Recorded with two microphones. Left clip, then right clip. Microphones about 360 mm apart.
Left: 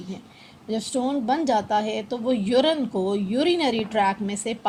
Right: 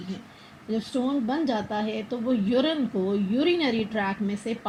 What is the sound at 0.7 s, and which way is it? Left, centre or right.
A woman's voice, left.